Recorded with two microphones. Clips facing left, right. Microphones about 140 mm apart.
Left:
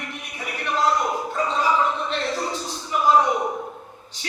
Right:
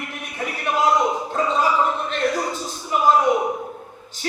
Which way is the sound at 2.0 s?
50° right (ahead or behind).